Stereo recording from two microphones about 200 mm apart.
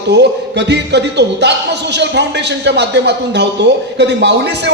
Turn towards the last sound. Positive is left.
turn(degrees=-60)  # may be behind; listen again after turning